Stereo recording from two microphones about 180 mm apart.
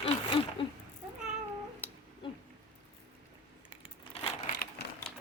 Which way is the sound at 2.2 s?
30° left (ahead or behind).